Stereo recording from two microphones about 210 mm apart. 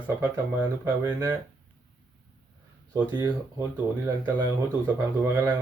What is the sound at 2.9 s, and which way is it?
Speech, 20° right (ahead or behind).